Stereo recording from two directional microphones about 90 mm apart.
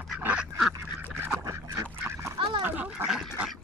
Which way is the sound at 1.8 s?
30° right (ahead or behind).